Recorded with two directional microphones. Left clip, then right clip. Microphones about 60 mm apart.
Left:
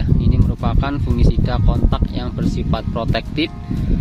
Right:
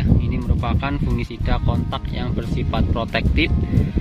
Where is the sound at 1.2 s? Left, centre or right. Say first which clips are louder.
Left 4 dB; centre.